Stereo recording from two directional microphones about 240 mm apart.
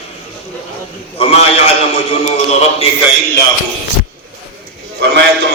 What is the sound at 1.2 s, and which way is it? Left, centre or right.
A man's voice, left.